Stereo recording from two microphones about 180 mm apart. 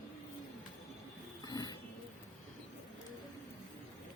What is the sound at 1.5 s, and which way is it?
Roaring cats, 20° left (ahead or behind).